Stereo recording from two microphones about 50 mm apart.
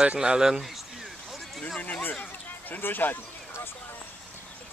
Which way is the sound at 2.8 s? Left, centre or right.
Left.